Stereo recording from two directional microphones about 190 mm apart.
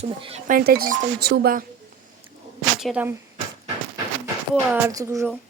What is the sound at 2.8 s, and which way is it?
Speech, 5° right (ahead or behind).